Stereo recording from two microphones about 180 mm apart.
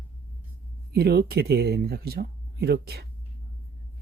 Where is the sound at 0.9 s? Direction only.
60° right (ahead or behind).